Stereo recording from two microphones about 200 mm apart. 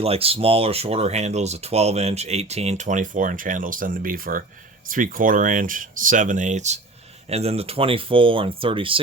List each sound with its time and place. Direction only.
0.0 s speech: 30° right (ahead or behind)